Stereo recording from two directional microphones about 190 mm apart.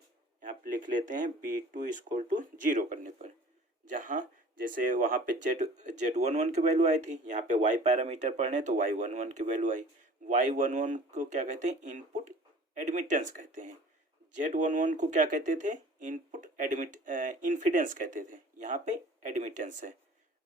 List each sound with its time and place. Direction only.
0.4 s speech: 40° right (ahead or behind)